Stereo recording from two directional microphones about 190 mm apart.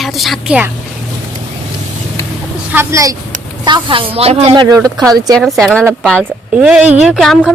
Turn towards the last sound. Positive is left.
turn(degrees=0)  # may be behind; listen again after turning